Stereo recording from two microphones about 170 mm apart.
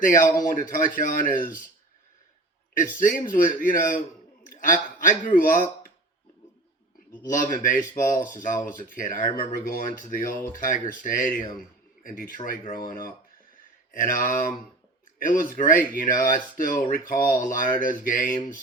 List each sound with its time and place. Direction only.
0.0 s speech: 50° left (ahead or behind)
2.7 s speech: 50° left (ahead or behind)
7.2 s speech: 50° left (ahead or behind)